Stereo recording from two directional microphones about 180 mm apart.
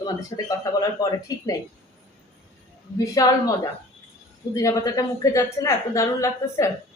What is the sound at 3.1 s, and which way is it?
A woman's voice, 20° left (ahead or behind).